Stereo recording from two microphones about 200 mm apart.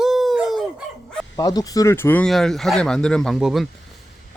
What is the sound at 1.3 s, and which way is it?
Speech, 20° left (ahead or behind).